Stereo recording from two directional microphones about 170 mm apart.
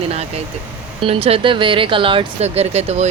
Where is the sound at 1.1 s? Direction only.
35° right (ahead or behind).